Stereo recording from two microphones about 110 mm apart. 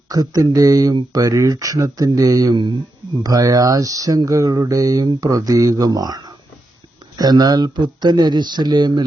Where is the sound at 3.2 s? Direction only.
35° right (ahead or behind).